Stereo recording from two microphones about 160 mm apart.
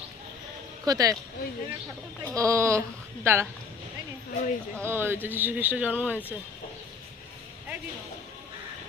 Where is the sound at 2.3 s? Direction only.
20° right (ahead or behind).